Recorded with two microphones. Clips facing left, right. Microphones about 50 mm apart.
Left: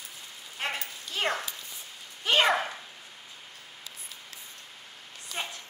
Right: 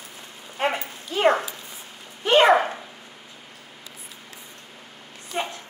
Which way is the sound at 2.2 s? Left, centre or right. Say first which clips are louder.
Right 8 dB; centre.